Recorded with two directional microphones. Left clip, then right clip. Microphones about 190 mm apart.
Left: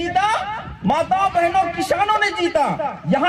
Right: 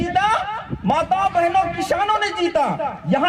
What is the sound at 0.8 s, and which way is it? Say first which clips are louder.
A man's voice: left 1 dB; 45° left (ahead or behind).